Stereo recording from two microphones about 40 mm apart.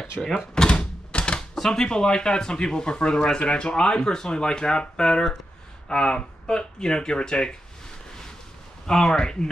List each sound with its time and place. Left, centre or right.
0.2 s speech: centre
0.6 s typewriter: left
1.5 s speech: centre
8.8 s speech: centre